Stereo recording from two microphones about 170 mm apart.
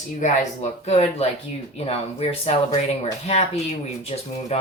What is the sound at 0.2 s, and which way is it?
Speech, 40° left (ahead or behind).